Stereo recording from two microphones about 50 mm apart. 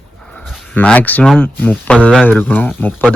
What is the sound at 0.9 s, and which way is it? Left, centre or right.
Speech, left.